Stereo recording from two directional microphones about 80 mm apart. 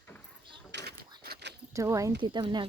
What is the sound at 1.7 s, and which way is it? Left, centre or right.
Speech, right.